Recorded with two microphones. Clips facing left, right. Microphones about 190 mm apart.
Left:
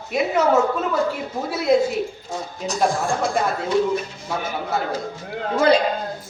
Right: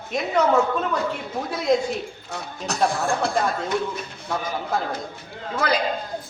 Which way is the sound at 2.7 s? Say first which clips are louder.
Left 1 dB; 65° right (ahead or behind).